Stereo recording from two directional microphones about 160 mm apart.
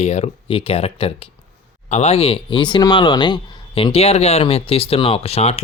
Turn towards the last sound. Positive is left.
turn(degrees=40)  # may be behind; listen again after turning